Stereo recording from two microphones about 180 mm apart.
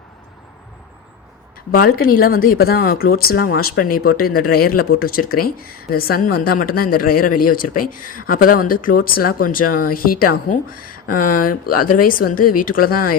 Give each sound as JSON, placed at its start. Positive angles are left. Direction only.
{"t": 1.7, "sound": "speech", "side_deg": 55}